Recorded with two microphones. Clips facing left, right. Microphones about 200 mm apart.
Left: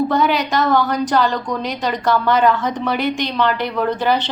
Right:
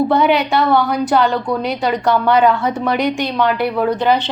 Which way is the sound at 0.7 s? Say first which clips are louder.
Right 1 dB; 10° right (ahead or behind).